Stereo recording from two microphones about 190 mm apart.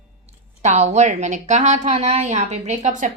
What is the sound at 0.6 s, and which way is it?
Speech, 35° right (ahead or behind).